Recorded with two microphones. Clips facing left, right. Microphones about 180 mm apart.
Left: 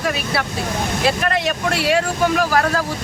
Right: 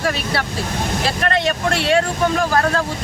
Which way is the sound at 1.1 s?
5° left (ahead or behind).